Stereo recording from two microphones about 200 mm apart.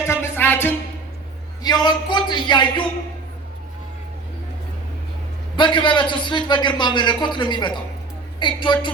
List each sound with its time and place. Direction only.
0.1 s music: 10° left (ahead or behind)
1.6 s a man's voice: 20° left (ahead or behind)
5.5 s a man's voice: 25° left (ahead or behind)